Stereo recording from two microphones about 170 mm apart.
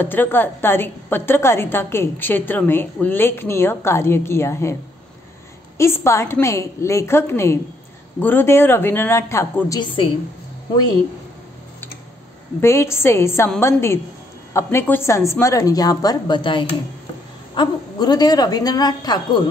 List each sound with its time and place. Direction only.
0.0 s a woman's voice: 10° left (ahead or behind)
5.8 s a woman's voice: 15° left (ahead or behind)
12.5 s a woman's voice: 15° left (ahead or behind)